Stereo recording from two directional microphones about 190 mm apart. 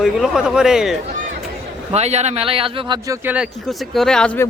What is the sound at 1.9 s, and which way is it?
Speech, 35° right (ahead or behind).